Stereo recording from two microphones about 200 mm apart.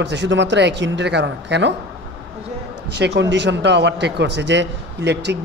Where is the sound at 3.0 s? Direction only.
60° right (ahead or behind).